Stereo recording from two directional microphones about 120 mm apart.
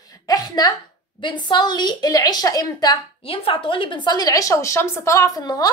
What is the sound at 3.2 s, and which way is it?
A woman's voice, 50° left (ahead or behind).